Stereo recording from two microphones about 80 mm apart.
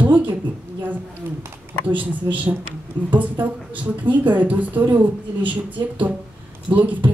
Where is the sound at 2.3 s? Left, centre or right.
Right.